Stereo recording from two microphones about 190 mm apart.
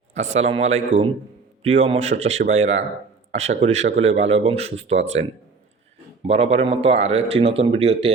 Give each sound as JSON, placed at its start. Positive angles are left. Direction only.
{"t": 0.1, "sound": "a man's voice", "side_deg": -90}
{"t": 0.3, "sound": "speech", "side_deg": -35}
{"t": 6.2, "sound": "speech", "side_deg": -30}